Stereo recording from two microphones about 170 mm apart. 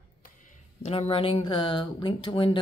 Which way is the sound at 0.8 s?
35° left (ahead or behind).